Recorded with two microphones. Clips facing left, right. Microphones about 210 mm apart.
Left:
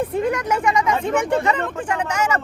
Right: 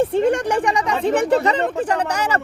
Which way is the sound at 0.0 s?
30° right (ahead or behind).